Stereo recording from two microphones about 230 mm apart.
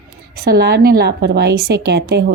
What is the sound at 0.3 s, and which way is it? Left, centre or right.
A woman's voice, right.